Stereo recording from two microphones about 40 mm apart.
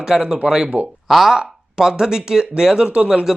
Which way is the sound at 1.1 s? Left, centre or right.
Centre.